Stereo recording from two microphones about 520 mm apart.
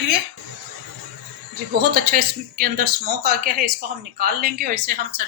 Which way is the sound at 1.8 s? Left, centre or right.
Centre.